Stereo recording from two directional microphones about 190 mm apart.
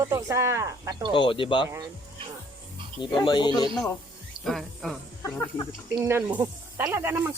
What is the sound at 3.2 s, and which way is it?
Speech, 25° left (ahead or behind).